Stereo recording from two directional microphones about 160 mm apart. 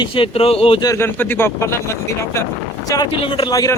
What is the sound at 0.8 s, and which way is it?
Speech, 20° left (ahead or behind).